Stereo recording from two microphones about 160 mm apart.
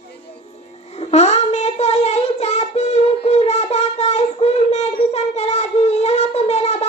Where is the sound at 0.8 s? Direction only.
45° left (ahead or behind).